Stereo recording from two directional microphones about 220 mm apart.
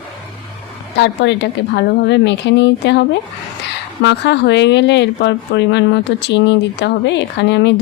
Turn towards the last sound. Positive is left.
turn(degrees=50)  # may be behind; listen again after turning